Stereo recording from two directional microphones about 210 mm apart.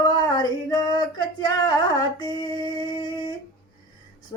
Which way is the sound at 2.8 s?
20° left (ahead or behind).